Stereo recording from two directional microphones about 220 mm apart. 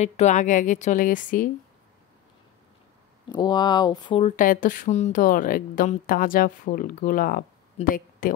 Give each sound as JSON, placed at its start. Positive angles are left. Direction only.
{"t": 0.0, "sound": "speech", "side_deg": 30}
{"t": 3.3, "sound": "speech", "side_deg": 20}
{"t": 4.4, "sound": "speech", "side_deg": 35}